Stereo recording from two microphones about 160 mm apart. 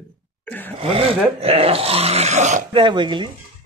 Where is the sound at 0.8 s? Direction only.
35° right (ahead or behind).